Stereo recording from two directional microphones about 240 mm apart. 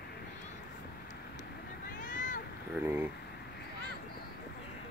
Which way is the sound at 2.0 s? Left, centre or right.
Left.